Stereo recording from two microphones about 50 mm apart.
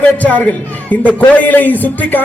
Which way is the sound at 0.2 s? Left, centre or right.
Left.